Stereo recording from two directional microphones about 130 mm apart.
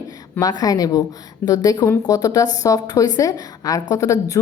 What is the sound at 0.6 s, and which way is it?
A woman's voice, 25° left (ahead or behind).